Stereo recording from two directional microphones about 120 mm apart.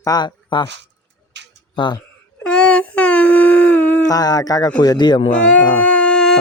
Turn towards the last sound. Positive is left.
turn(degrees=5)  # may be behind; listen again after turning